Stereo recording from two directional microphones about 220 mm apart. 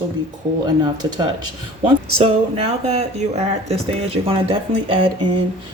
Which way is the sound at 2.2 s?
25° right (ahead or behind).